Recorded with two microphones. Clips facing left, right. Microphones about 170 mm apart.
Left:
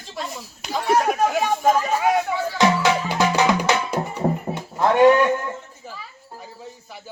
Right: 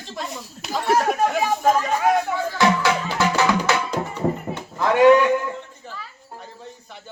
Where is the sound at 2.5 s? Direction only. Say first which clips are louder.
Left 1 dB; 20° left (ahead or behind).